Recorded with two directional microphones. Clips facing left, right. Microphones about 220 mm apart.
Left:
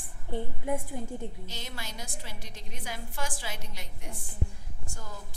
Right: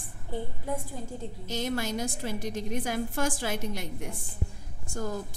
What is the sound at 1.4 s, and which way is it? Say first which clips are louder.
A woman's voice: right 12 dB; 45° right (ahead or behind).